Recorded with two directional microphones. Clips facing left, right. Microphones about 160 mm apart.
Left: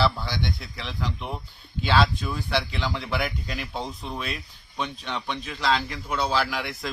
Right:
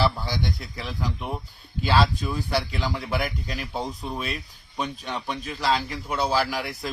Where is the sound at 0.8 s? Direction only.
5° right (ahead or behind).